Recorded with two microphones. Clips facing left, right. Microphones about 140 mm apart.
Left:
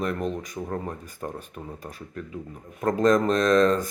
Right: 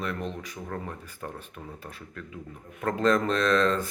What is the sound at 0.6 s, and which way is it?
Speech, 30° left (ahead or behind).